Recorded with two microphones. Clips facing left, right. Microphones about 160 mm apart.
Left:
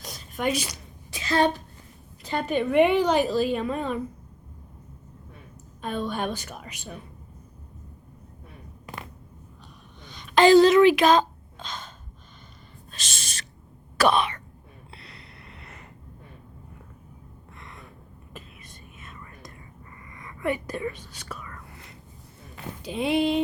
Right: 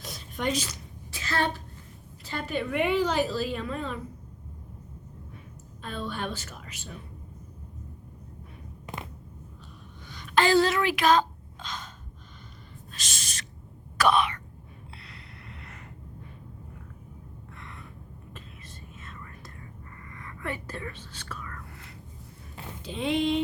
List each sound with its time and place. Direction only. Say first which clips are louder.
0.0 s a sound: left 3 dB; centre (ahead or behind); by 1.6 s 15° left (ahead or behind)
2.2 s a woman's voice: left 6 dB; 20° left (ahead or behind)
6.1 s a woman's voice: left 5 dB; 15° left (ahead or behind)
10.1 s a sound: left 7 dB; 20° left (ahead or behind)
12.9 s owl: left 2 dB; 25° left (ahead or behind)
14.0 s throat clearing: left 2 dB; 30° left (ahead or behind)
15.0 s a sound: even; 25° left (ahead or behind)
18.3 s whispering: left 4 dB; 15° left (ahead or behind)
22.8 s a woman's voice: left 3 dB; 10° left (ahead or behind)